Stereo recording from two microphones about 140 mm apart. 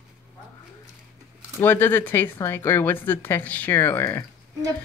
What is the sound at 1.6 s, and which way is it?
Speech, 15° left (ahead or behind).